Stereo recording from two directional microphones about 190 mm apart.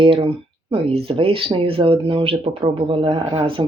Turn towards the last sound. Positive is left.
turn(degrees=-30)  # may be behind; listen again after turning